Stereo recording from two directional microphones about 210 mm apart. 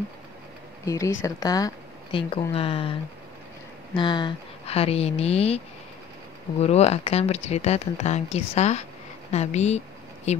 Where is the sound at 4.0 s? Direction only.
20° left (ahead or behind).